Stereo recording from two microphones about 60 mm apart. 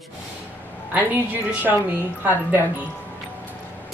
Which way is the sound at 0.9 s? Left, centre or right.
Right.